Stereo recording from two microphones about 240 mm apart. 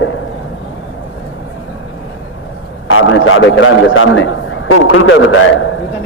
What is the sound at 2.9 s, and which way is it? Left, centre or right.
A man's voice, left.